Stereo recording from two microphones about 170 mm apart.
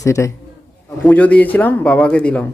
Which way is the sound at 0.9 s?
10° left (ahead or behind).